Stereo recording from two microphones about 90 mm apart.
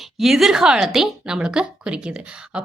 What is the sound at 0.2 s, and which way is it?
A woman's voice, 5° right (ahead or behind).